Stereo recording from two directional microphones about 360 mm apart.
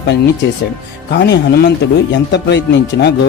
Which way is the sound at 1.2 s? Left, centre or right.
Left.